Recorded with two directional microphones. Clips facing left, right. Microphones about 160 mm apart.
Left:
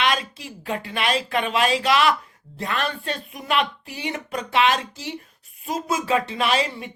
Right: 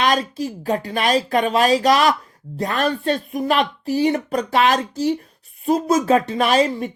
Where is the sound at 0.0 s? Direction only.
40° right (ahead or behind).